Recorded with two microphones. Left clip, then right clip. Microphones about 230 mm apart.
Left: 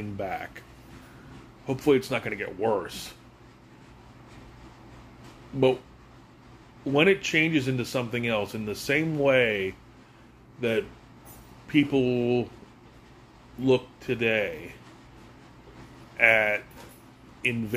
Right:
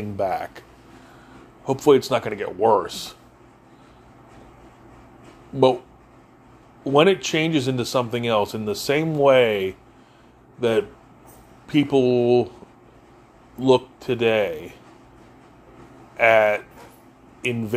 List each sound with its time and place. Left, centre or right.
0.2 s speech: right
1.7 s speech: right
6.8 s speech: right
13.6 s speech: right
16.2 s speech: right